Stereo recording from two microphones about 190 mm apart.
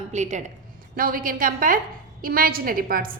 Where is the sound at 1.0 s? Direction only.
50° right (ahead or behind).